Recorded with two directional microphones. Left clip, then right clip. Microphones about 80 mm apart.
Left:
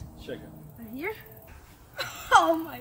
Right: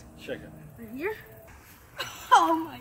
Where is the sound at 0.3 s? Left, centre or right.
Left.